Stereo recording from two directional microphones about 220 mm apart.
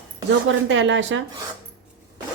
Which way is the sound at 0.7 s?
60° right (ahead or behind).